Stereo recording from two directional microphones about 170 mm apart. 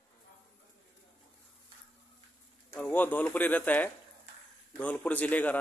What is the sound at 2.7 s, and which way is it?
A man's voice, 10° left (ahead or behind).